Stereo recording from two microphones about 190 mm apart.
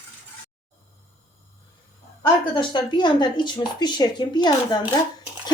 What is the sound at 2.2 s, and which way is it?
Speech, 25° left (ahead or behind).